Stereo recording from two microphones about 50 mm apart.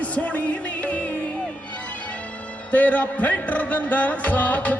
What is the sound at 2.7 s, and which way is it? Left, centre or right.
Music, left.